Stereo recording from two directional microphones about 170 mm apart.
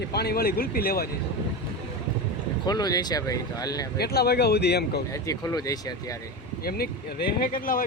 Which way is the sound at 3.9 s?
70° left (ahead or behind).